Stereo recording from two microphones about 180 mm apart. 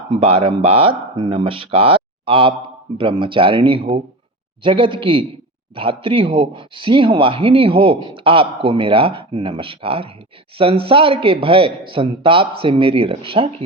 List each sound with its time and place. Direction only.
0.1 s a man's voice: 30° right (ahead or behind)